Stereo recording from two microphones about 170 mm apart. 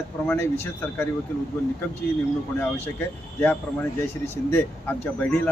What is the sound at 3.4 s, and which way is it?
Speech, 15° left (ahead or behind).